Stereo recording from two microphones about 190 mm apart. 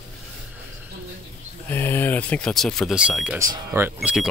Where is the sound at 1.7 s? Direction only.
10° left (ahead or behind).